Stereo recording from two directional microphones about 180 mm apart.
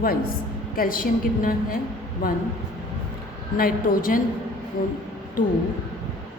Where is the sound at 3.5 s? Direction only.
50° left (ahead or behind).